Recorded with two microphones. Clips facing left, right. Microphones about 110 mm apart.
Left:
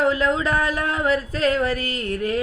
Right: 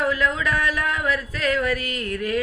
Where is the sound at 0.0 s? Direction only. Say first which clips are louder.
Left 3 dB; 25° left (ahead or behind).